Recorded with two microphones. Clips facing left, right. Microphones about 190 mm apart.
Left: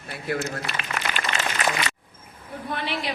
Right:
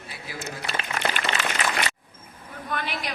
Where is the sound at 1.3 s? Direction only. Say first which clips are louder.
Even; 50° left (ahead or behind).